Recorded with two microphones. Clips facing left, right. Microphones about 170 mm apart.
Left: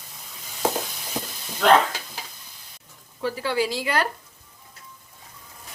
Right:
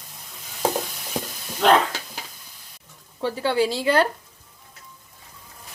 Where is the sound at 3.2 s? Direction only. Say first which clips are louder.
Right 3 dB; 30° right (ahead or behind).